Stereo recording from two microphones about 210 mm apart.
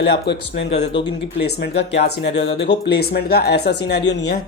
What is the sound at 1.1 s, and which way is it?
Speech, 55° left (ahead or behind).